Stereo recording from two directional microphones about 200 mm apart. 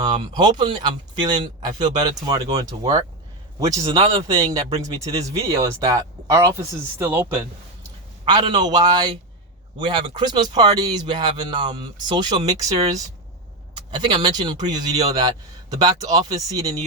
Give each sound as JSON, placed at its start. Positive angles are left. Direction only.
{"t": 0.0, "sound": "speech", "side_deg": -20}
{"t": 8.2, "sound": "a man's voice", "side_deg": -20}
{"t": 13.9, "sound": "speech", "side_deg": -20}